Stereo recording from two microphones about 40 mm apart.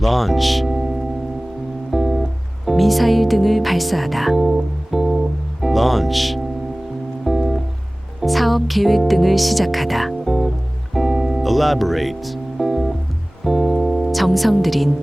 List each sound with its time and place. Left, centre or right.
0.0 s speech: centre
1.9 s guitar: centre
2.6 s speech: centre
5.6 s music: centre
8.2 s speech: centre
10.9 s music: centre